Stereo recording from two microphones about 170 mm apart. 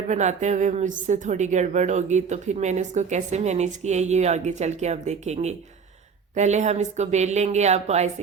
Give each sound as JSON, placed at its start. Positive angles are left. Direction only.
{"t": 0.1, "sound": "a woman's voice", "side_deg": -45}